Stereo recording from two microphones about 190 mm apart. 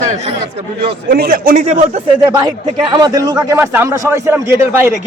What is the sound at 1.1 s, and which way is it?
Speech, 50° right (ahead or behind).